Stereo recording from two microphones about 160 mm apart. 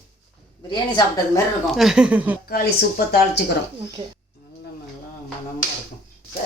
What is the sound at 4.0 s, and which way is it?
Speech, 35° right (ahead or behind).